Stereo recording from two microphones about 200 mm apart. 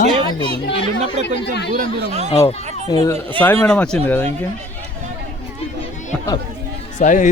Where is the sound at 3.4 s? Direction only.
10° left (ahead or behind).